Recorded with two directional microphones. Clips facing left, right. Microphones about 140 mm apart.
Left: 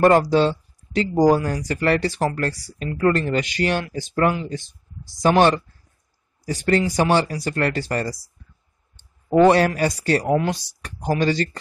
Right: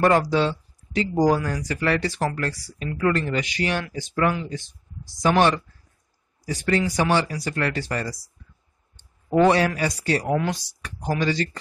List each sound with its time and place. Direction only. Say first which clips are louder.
0.3 s speech: left 4 dB; 35° left (ahead or behind)
9.4 s speech: left 3 dB; 45° left (ahead or behind)